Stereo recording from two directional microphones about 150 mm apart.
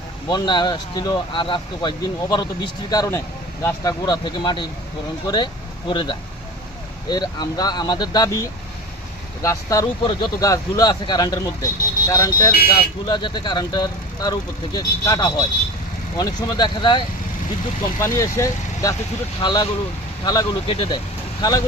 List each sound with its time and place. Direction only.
0.3 s speech: 30° left (ahead or behind)
18.0 s speech: 20° left (ahead or behind); by 21.0 s 35° left (ahead or behind)